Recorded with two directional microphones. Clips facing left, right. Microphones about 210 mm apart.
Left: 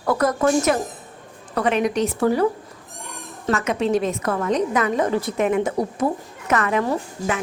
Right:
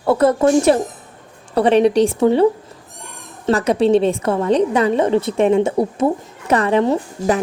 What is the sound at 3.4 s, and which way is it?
A woman's voice, 35° right (ahead or behind).